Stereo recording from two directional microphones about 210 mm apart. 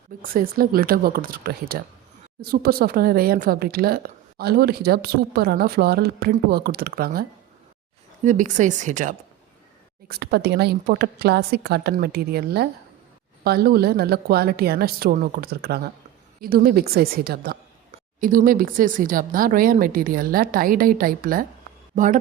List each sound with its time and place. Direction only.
0.2 s speech: 45° right (ahead or behind)
10.1 s speech: 50° right (ahead or behind)